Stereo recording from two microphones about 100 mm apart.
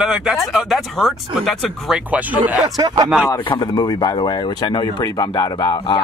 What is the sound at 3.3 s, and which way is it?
Speech, 40° left (ahead or behind).